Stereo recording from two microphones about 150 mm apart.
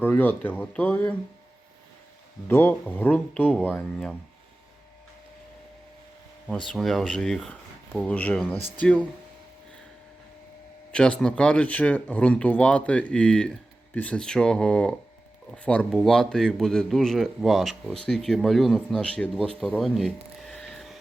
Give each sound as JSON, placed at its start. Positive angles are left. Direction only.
{"t": 0.0, "sound": "speech", "side_deg": 10}
{"t": 2.5, "sound": "speech", "side_deg": 15}
{"t": 6.7, "sound": "speech", "side_deg": 0}
{"t": 10.9, "sound": "speech", "side_deg": 5}
{"t": 19.5, "sound": "a sound", "side_deg": 0}